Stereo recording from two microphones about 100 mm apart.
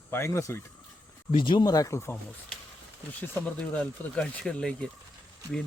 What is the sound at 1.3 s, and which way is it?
Speech, 55° left (ahead or behind).